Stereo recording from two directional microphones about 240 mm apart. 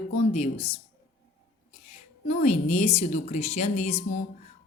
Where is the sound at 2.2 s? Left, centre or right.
Left.